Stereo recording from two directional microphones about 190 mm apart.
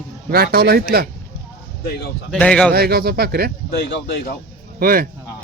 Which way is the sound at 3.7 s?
60° left (ahead or behind).